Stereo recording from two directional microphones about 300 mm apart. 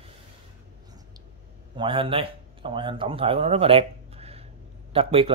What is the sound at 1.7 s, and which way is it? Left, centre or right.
A man's voice, centre.